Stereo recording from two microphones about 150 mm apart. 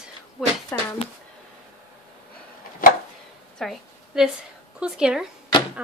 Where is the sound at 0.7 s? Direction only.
10° left (ahead or behind).